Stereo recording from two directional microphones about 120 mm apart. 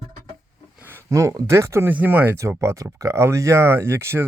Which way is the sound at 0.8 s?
20° right (ahead or behind).